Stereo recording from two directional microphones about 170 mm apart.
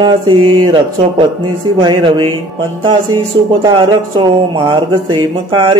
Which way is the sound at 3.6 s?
25° right (ahead or behind).